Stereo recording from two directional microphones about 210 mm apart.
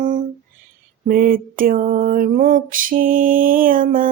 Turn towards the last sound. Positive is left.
turn(degrees=-40)  # may be behind; listen again after turning